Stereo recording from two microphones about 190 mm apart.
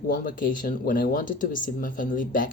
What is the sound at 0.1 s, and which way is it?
Speech, 45° left (ahead or behind).